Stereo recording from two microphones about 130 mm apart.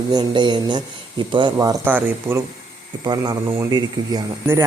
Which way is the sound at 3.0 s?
30° right (ahead or behind).